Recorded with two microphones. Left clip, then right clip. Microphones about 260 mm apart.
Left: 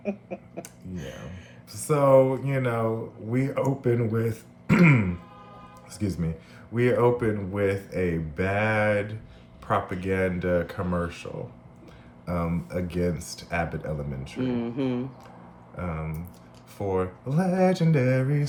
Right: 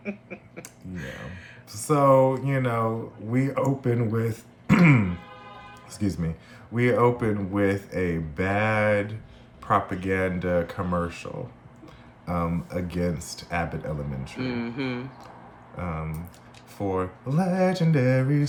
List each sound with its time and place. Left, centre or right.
0.0 s a sound: centre
1.7 s speech: centre
14.5 s speech: centre
15.8 s speech: centre